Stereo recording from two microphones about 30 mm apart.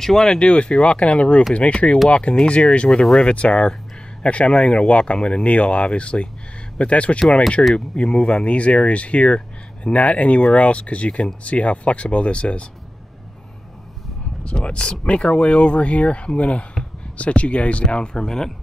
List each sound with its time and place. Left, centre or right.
0.0 s speech: centre
0.3 s speech: left
5.1 s speech: left
5.4 s speech: left
7.7 s speech: left
14.4 s speech: left
17.9 s speech: left
18.2 s speech: centre